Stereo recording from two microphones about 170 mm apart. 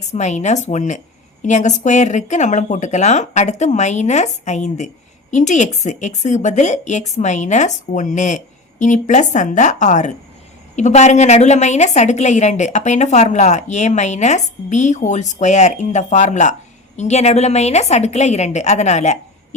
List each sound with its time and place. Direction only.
0.1 s a woman's voice: 45° left (ahead or behind)